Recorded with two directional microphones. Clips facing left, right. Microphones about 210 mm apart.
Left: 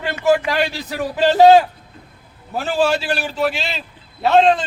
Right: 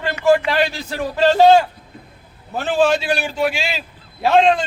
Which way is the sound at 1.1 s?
10° left (ahead or behind).